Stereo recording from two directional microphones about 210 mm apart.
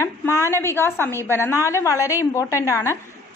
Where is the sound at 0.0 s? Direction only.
15° left (ahead or behind).